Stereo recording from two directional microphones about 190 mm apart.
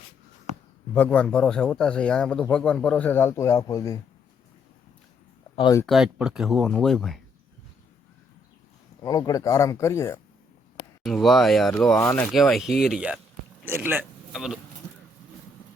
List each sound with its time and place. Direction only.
0.9 s speech: 10° left (ahead or behind)
5.5 s speech: 25° left (ahead or behind)
5.8 s speech: centre (ahead or behind)
9.0 s speech: 20° left (ahead or behind)
11.0 s speech: centre (ahead or behind)
11.9 s speech: 10° left (ahead or behind)